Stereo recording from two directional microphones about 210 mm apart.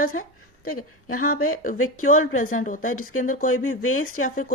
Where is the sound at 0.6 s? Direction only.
90° left.